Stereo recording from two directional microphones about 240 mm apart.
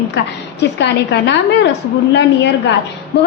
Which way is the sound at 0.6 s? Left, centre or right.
Left.